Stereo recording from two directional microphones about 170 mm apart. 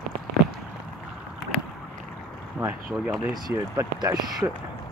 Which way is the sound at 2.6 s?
20° right (ahead or behind).